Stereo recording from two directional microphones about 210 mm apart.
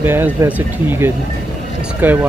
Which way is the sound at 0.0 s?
10° right (ahead or behind).